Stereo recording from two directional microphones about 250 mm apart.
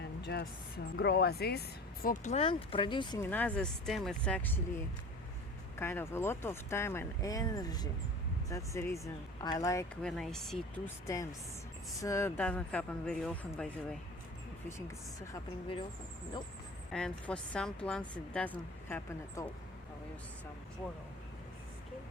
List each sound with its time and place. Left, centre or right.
0.9 s speech: left
2.0 s speech: left; by 4.6 s centre
5.7 s speech: centre
11.0 s a woman's voice: centre
16.9 s a woman's voice: centre